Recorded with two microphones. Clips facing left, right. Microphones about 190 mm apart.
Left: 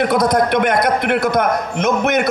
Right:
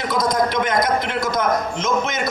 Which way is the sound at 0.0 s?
60° left (ahead or behind).